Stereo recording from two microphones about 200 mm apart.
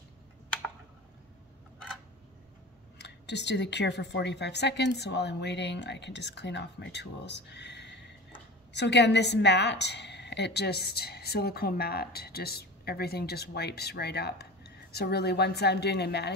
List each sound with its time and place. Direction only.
3.0 s a woman's voice: 60° left (ahead or behind)